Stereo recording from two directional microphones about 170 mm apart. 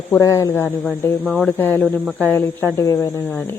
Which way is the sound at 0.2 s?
20° left (ahead or behind).